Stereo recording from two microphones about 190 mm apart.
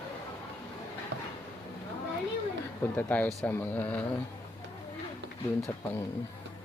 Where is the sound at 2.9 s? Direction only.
10° left (ahead or behind).